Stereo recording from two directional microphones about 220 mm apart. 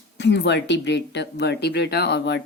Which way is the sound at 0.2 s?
50° left (ahead or behind).